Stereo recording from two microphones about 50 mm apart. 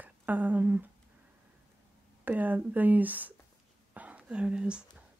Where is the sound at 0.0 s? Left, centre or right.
Right.